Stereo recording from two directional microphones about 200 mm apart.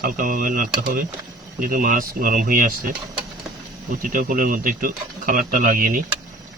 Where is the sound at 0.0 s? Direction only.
45° right (ahead or behind).